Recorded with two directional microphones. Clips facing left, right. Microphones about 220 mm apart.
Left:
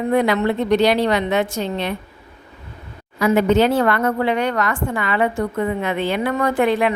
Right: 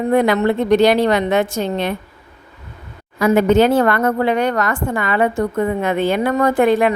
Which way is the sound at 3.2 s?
50° right (ahead or behind).